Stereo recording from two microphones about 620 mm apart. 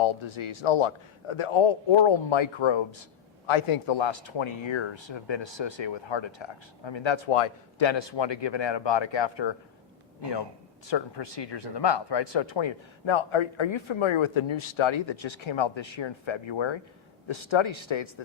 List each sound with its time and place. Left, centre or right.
0.0 s a man's voice: left
10.8 s a man's voice: left